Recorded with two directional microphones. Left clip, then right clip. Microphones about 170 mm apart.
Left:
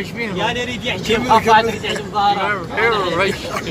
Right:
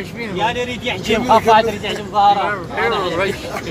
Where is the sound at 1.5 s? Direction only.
45° right (ahead or behind).